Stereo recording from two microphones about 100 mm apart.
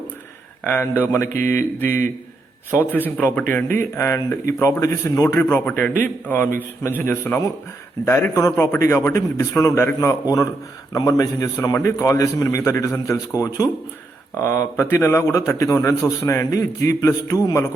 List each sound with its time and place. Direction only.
0.7 s a man's voice: 20° left (ahead or behind)